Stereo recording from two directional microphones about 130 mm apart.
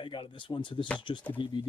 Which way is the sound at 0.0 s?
40° left (ahead or behind).